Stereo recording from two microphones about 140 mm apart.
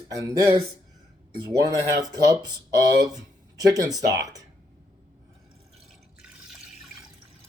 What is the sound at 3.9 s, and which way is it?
Speech, 25° right (ahead or behind).